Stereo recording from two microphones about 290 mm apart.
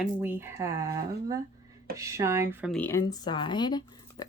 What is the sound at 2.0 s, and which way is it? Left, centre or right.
Speech, centre.